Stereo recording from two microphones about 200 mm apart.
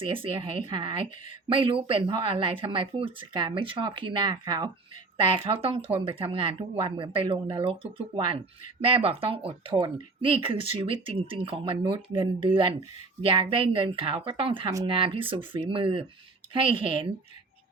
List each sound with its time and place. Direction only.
0.0 s speech: 25° right (ahead or behind)